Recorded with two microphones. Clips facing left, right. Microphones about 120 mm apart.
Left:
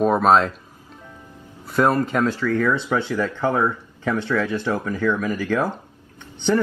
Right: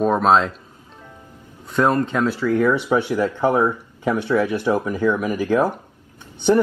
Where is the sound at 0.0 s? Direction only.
Centre (ahead or behind).